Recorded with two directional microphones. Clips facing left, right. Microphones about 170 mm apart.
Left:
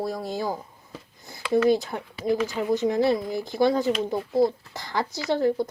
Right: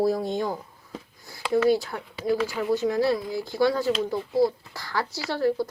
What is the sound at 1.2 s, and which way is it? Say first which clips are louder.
Speech: left 1 dB; 20° left (ahead or behind).